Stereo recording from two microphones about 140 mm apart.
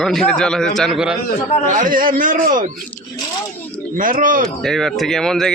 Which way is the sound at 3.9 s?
75° right (ahead or behind).